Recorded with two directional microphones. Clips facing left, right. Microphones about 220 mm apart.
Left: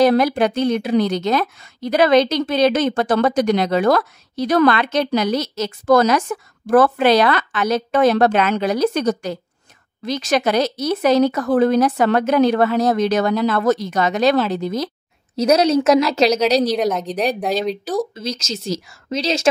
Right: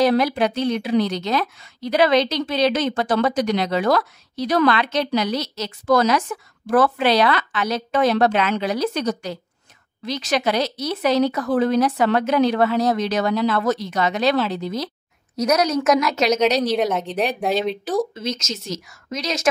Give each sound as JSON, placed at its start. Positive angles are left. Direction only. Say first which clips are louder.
{"t": 0.0, "sound": "a woman's voice", "louder": "left 3 dB", "side_deg": 45}
{"t": 15.3, "sound": "a woman's voice", "louder": "left 4 dB", "side_deg": 30}
{"t": 16.7, "sound": "a woman's voice", "louder": "left 1 dB", "side_deg": 0}
{"t": 18.1, "sound": "speech", "louder": "left 1 dB", "side_deg": 35}